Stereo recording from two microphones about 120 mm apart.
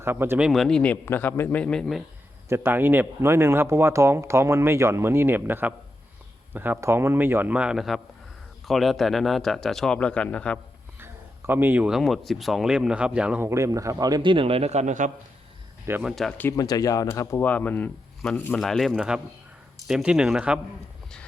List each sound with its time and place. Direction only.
0.0 s speech: 20° right (ahead or behind)
0.3 s speech: 5° right (ahead or behind)
1.0 s speech: 20° left (ahead or behind); by 2.0 s centre (ahead or behind)
2.5 s a man's voice: 20° right (ahead or behind); by 10.6 s 10° left (ahead or behind)
11.0 s a sound: 20° right (ahead or behind)
11.9 s speech: centre (ahead or behind)
13.4 s a man's voice: 25° right (ahead or behind); by 15.1 s 90° right
16.0 s speech: centre (ahead or behind)
16.6 s speech: 30° left (ahead or behind)
17.1 s speech: 20° left (ahead or behind)
18.6 s a man's voice: centre (ahead or behind)